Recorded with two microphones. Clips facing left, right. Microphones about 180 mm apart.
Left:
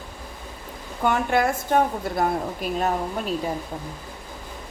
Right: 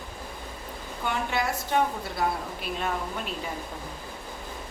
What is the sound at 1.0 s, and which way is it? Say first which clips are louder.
A woman's voice: left 7 dB; 50° left (ahead or behind).